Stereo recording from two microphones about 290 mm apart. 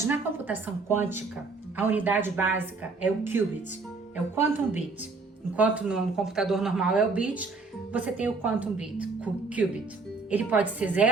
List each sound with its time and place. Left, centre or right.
0.1 s a woman's voice: centre